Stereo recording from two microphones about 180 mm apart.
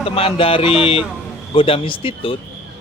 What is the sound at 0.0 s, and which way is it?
A man's voice, 30° left (ahead or behind).